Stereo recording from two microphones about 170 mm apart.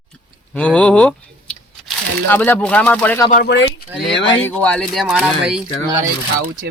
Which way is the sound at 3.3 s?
70° left (ahead or behind).